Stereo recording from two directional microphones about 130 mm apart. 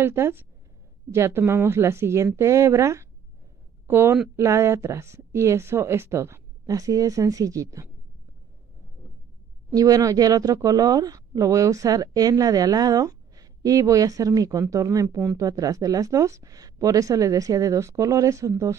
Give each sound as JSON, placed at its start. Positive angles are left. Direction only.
{"t": 0.0, "sound": "speech", "side_deg": -15}
{"t": 9.8, "sound": "speech", "side_deg": -25}